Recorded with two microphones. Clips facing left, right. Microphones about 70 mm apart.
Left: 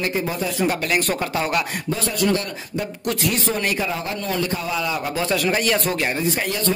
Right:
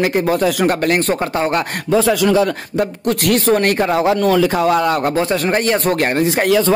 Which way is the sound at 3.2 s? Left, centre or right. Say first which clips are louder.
Right 10 dB; right.